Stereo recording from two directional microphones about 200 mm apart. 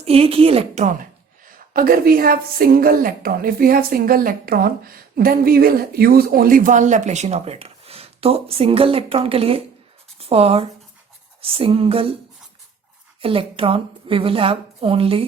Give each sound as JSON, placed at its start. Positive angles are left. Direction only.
{"t": 0.0, "sound": "a woman's voice", "side_deg": -30}
{"t": 13.2, "sound": "a woman's voice", "side_deg": -25}